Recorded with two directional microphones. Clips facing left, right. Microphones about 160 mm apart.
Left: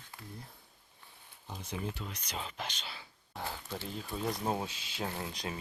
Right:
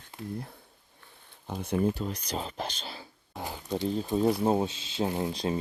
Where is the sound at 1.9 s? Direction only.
35° right (ahead or behind).